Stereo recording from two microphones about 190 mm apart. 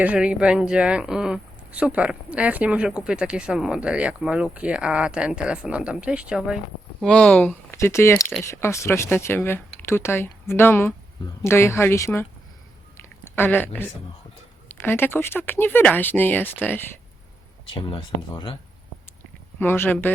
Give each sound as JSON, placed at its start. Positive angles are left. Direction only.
{"t": 0.0, "sound": "speech", "side_deg": -5}
{"t": 13.3, "sound": "speech", "side_deg": 10}
{"t": 17.7, "sound": "speech", "side_deg": 25}
{"t": 19.5, "sound": "speech", "side_deg": 10}